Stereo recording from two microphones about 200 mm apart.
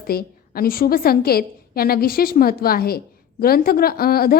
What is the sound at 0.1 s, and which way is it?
A woman's voice, 50° left (ahead or behind).